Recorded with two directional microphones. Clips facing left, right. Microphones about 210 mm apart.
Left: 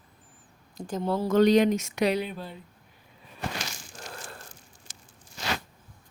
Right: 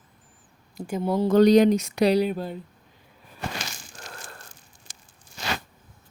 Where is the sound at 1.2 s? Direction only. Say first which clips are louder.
Right 4 dB; 35° right (ahead or behind).